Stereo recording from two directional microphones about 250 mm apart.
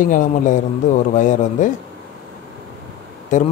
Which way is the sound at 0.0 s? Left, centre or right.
Left.